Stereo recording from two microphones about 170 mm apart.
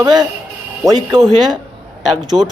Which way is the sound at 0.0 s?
25° right (ahead or behind).